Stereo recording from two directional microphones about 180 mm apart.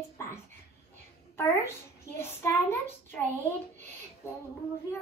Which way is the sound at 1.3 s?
15° left (ahead or behind).